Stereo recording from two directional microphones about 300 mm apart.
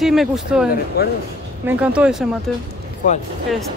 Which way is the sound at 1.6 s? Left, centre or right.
Centre.